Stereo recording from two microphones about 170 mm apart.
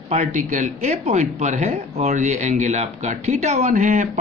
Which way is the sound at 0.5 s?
40° right (ahead or behind).